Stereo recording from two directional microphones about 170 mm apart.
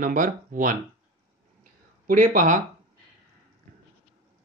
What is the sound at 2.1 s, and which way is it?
Speech, 50° right (ahead or behind).